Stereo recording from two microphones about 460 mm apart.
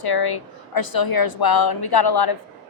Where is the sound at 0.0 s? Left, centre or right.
Left.